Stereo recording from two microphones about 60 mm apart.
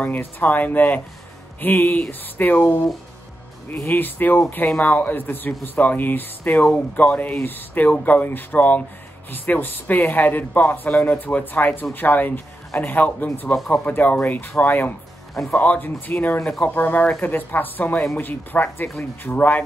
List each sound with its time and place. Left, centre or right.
0.4 s speech: left
15.3 s speech: centre
15.6 s speech: left